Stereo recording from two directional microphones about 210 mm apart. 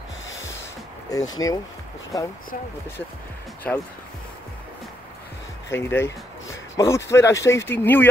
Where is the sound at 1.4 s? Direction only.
15° left (ahead or behind).